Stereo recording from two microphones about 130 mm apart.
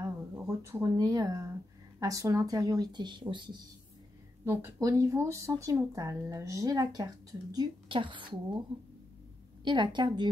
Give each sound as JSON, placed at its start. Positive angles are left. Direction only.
{"t": 0.5, "sound": "speech", "side_deg": -25}
{"t": 4.5, "sound": "speech", "side_deg": -20}
{"t": 9.7, "sound": "speech", "side_deg": -35}